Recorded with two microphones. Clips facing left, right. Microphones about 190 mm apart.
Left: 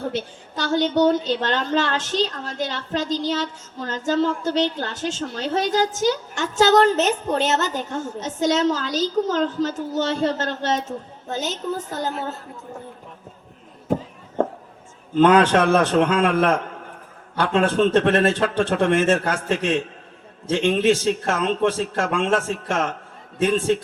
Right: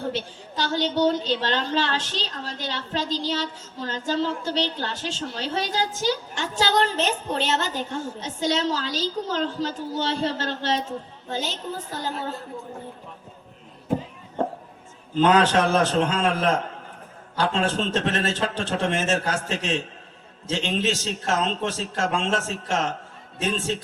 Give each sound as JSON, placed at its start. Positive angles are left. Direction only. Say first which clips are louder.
{"t": 0.1, "sound": "a woman's voice", "louder": "left 2 dB", "side_deg": 50}
{"t": 15.1, "sound": "a man's voice", "louder": "left 4 dB", "side_deg": 55}